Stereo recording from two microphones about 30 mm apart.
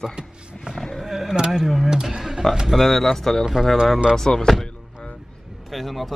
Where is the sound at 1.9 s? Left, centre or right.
Right.